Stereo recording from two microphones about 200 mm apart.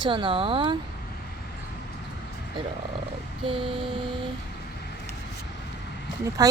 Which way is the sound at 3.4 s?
25° right (ahead or behind).